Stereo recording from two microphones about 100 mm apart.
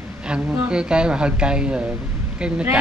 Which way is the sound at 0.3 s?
10° right (ahead or behind).